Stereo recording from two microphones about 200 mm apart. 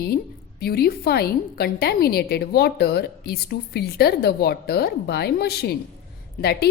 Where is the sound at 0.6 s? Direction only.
50° left (ahead or behind).